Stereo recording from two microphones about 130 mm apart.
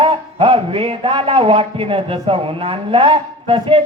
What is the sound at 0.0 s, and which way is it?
A man's voice, 45° right (ahead or behind).